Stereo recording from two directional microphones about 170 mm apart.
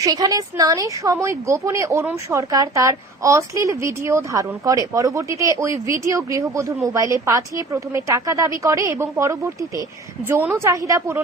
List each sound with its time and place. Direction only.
0.0 s a woman's voice: 20° right (ahead or behind)